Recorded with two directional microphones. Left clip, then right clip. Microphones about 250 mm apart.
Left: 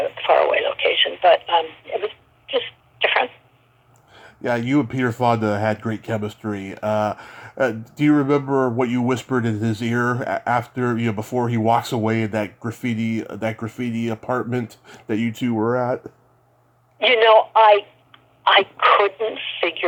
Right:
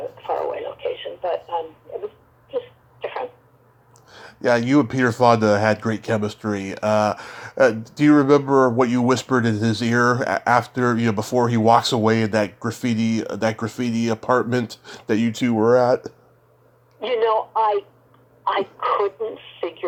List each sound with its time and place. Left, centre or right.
0.0 s radio: left
2.5 s sneeze: left
4.1 s a sound: centre
4.4 s speech: centre
17.0 s speech: left